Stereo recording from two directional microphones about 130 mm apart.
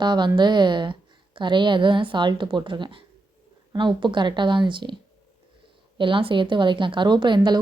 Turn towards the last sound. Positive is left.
turn(degrees=-35)  # may be behind; listen again after turning